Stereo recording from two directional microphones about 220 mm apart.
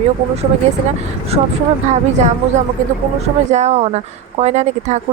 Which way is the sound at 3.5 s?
30° right (ahead or behind).